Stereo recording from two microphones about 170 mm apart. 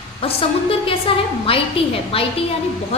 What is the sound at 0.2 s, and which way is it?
A woman's voice, 35° left (ahead or behind).